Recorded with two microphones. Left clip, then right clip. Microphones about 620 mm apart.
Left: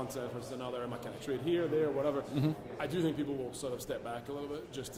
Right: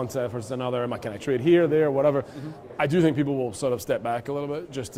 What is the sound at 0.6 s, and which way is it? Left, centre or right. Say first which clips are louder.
A man's voice: right 13 dB; right.